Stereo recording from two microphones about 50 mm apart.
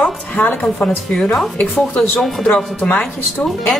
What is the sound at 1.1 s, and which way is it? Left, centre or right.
Speech, centre.